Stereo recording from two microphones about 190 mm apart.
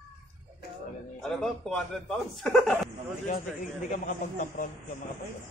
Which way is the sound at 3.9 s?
45° left (ahead or behind).